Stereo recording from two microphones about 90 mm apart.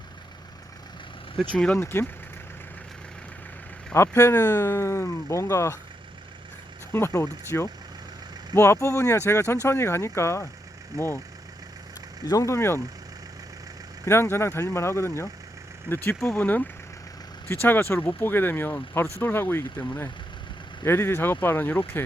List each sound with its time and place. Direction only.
1.5 s speech: 10° left (ahead or behind)
1.8 s speech: 25° left (ahead or behind)
3.9 s speech: 30° left (ahead or behind)
6.9 s speech: 25° left (ahead or behind)
12.2 s speech: 40° left (ahead or behind)
14.0 s speech: 25° left (ahead or behind)
20.8 s speech: 25° left (ahead or behind)